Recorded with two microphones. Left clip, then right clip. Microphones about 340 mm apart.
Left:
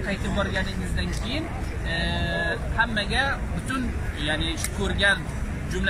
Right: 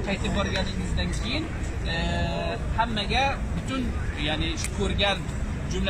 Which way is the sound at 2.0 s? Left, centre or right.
Right.